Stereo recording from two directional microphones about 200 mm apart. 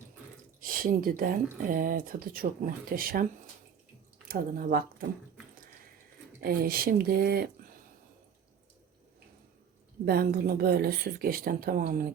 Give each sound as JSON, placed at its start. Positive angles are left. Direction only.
{"t": 0.6, "sound": "speech", "side_deg": -45}
{"t": 4.3, "sound": "speech", "side_deg": -45}
{"t": 6.4, "sound": "speech", "side_deg": -45}
{"t": 10.1, "sound": "speech", "side_deg": -50}